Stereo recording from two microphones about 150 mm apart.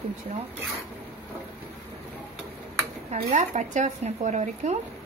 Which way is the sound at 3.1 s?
55° right (ahead or behind).